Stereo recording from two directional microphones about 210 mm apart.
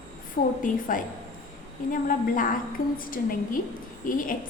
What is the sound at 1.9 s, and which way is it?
A woman's voice, 40° left (ahead or behind).